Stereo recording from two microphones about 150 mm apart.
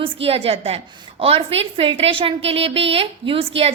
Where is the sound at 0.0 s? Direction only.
40° right (ahead or behind).